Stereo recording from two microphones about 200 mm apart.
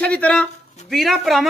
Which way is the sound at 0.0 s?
5° left (ahead or behind).